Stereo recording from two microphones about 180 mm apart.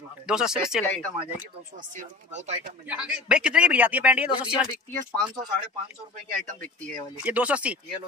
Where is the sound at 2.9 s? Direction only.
5° right (ahead or behind).